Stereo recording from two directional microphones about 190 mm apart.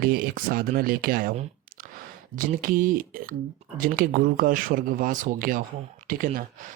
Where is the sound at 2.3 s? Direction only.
45° right (ahead or behind).